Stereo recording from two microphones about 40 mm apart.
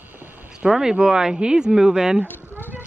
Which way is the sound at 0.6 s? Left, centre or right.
Centre.